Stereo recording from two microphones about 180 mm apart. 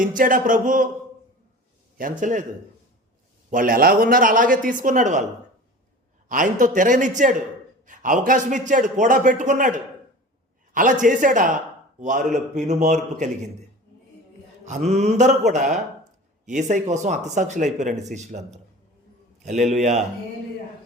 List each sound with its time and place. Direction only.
0.1 s a man's voice: 50° right (ahead or behind)
2.0 s a man's voice: 45° right (ahead or behind)
3.5 s a man's voice: 50° right (ahead or behind)
6.2 s a man's voice: 45° right (ahead or behind)
14.8 s speech: 40° right (ahead or behind)
19.7 s speech: 40° right (ahead or behind)